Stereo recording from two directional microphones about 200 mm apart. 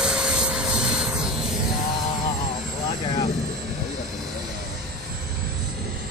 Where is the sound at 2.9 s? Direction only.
20° left (ahead or behind).